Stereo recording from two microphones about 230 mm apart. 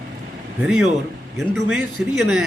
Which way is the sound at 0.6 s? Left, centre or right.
Centre.